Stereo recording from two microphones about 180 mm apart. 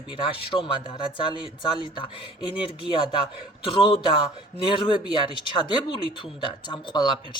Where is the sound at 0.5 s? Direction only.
20° left (ahead or behind).